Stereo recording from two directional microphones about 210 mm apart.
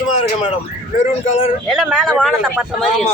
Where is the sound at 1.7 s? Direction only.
Centre (ahead or behind).